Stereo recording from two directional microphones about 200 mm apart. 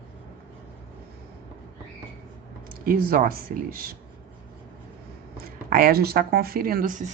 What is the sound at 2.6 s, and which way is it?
Speech, 45° right (ahead or behind).